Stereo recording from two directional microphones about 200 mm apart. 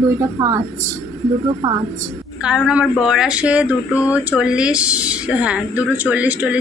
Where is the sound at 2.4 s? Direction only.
5° right (ahead or behind).